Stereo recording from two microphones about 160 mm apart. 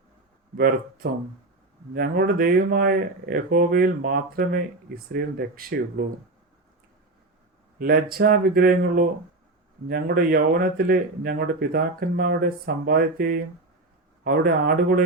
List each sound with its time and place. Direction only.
1.9 s a man's voice: 70° right (ahead or behind)
7.8 s a man's voice: 70° right (ahead or behind)